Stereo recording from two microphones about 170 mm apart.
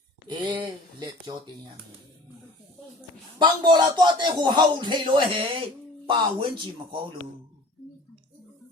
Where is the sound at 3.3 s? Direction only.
25° right (ahead or behind).